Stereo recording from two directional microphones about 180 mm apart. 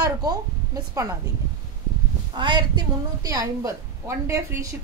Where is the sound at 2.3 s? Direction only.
25° right (ahead or behind).